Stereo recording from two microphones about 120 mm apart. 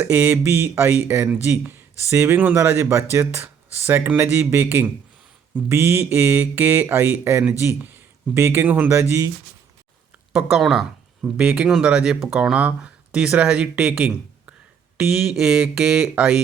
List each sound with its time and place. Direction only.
0.0 s speech: 15° right (ahead or behind)
10.3 s speech: 5° right (ahead or behind)